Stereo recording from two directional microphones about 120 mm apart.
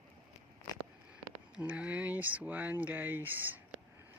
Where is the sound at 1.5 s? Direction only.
10° right (ahead or behind).